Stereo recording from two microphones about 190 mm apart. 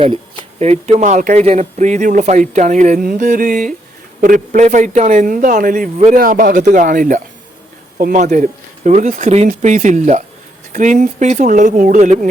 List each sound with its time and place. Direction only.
0.0 s a man's voice: 25° right (ahead or behind); by 12.1 s 45° right (ahead or behind)